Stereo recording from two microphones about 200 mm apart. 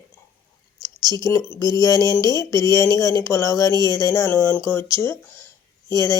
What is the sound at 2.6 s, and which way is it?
Speech, 20° right (ahead or behind).